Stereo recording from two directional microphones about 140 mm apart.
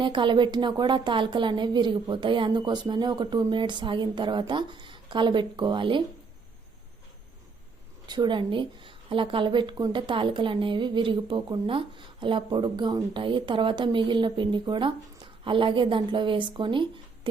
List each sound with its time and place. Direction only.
0.0 s a woman's voice: 35° right (ahead or behind)
8.0 s a woman's voice: 30° right (ahead or behind)